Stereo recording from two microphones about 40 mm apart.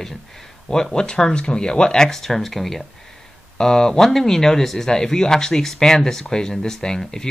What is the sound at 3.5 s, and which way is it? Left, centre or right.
Speech, centre.